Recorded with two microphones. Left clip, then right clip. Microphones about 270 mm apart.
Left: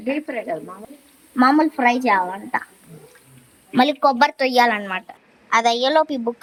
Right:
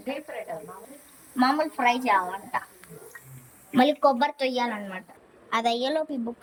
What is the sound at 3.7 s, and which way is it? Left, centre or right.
A child's voice, centre.